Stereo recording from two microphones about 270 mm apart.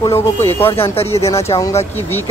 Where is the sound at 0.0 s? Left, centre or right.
Centre.